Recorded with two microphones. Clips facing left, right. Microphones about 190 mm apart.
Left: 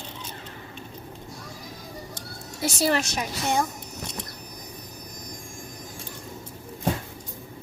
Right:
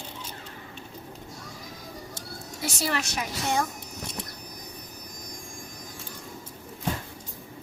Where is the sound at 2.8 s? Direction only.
30° left (ahead or behind).